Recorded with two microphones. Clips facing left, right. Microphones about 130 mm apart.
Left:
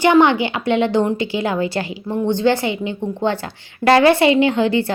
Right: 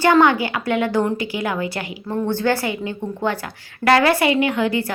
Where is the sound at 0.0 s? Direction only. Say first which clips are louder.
Left 2 dB; 20° left (ahead or behind).